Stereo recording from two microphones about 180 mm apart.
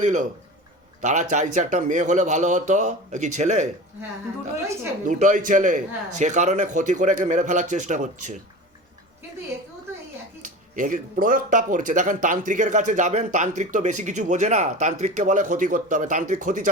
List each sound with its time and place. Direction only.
0.0 s speech: 40° right (ahead or behind)
5.0 s speech: 45° right (ahead or behind)
10.4 s speech: 45° right (ahead or behind)